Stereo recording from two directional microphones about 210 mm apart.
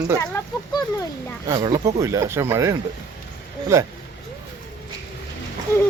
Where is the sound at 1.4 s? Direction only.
20° right (ahead or behind).